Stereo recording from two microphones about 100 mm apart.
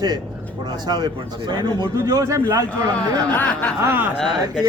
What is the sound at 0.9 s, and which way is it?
Speech, 45° right (ahead or behind).